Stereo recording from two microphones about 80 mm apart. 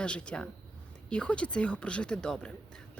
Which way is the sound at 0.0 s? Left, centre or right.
Centre.